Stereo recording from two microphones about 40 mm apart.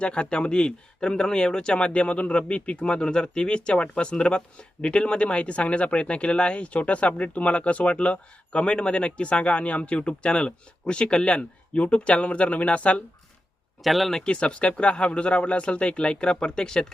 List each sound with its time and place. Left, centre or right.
0.0 s speech: left
13.8 s speech: centre
14.3 s speech: left